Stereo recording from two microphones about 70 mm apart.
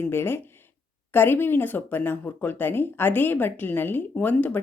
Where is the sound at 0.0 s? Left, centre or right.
Left.